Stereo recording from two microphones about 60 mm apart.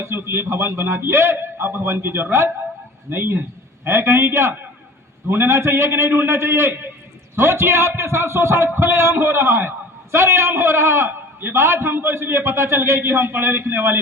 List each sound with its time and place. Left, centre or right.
0.0 s a man's voice: right